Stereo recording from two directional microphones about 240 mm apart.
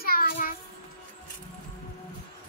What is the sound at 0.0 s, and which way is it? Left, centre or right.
Child singing, left.